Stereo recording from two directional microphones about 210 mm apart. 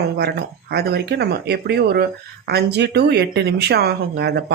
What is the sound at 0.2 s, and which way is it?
Speech, 50° right (ahead or behind).